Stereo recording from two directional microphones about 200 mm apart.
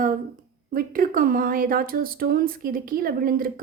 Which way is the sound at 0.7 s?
45° right (ahead or behind).